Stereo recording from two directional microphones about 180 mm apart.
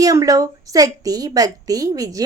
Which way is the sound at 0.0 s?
20° right (ahead or behind).